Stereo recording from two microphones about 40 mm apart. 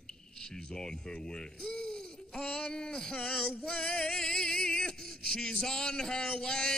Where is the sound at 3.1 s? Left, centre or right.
Left.